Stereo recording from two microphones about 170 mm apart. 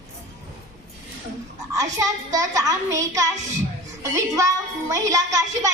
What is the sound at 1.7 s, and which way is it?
A woman's voice, 20° right (ahead or behind).